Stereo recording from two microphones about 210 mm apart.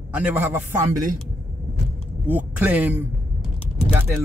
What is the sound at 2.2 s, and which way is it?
A man's voice, 10° right (ahead or behind).